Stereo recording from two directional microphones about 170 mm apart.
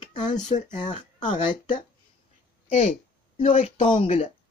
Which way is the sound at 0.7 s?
25° left (ahead or behind).